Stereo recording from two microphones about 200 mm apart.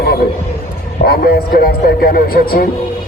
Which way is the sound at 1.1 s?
50° left (ahead or behind).